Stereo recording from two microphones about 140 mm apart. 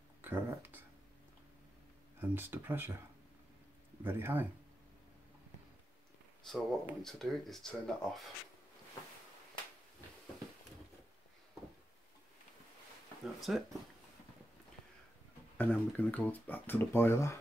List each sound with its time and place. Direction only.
0.2 s speech: 15° right (ahead or behind)
2.1 s speech: 15° right (ahead or behind)
4.0 s speech: 15° right (ahead or behind)
6.4 s speech: 5° left (ahead or behind)
13.2 s speech: centre (ahead or behind)
15.5 s speech: 10° left (ahead or behind)